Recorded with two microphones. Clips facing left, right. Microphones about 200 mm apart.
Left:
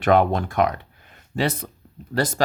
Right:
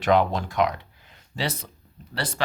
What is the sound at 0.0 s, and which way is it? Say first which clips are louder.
Speech: left 3 dB; 55° left (ahead or behind).